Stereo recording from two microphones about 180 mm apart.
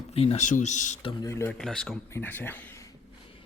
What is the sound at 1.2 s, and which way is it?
Speech, 15° left (ahead or behind).